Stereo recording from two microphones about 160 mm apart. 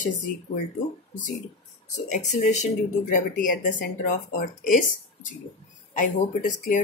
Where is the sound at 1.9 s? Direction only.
50° left (ahead or behind).